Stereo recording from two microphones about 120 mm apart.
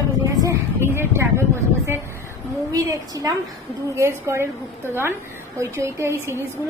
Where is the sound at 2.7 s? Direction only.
30° right (ahead or behind).